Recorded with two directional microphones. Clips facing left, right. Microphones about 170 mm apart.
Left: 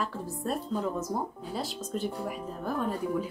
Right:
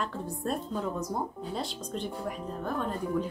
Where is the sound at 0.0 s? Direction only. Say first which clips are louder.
Even; centre (ahead or behind).